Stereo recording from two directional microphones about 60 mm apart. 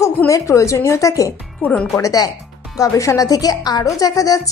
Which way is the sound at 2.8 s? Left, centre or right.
Left.